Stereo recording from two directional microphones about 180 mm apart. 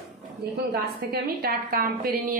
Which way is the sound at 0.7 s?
60° right (ahead or behind).